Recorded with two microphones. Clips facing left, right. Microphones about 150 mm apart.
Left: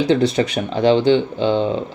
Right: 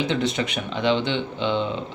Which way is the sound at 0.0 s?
35° left (ahead or behind).